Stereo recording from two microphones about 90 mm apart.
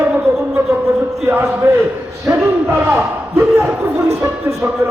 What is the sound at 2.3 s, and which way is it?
Speech, 25° right (ahead or behind).